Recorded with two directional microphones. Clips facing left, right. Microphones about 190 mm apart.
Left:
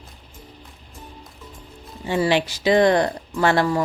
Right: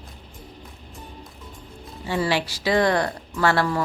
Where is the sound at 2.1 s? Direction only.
20° left (ahead or behind).